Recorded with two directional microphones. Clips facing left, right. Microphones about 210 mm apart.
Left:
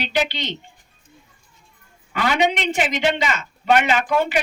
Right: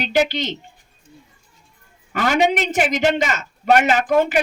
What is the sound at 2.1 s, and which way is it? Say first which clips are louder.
A man's voice: right 2 dB; 45° right (ahead or behind).